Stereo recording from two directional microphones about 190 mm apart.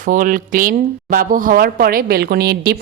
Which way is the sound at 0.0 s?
45° right (ahead or behind).